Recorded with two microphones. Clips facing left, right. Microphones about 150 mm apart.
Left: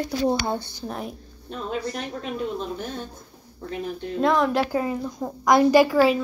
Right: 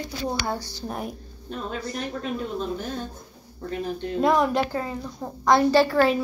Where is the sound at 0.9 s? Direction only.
5° right (ahead or behind).